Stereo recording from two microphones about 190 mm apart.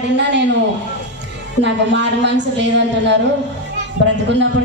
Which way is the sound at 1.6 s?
65° right (ahead or behind).